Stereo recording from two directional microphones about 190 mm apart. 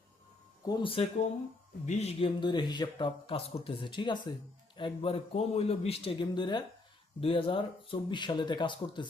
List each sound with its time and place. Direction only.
0.6 s speech: 25° left (ahead or behind)